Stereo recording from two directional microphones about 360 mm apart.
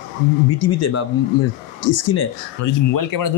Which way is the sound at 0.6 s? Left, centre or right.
Left.